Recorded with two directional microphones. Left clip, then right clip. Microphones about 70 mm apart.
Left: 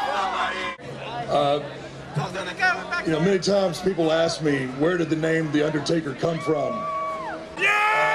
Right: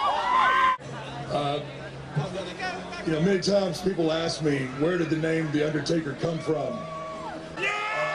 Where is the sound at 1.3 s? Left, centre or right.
Left.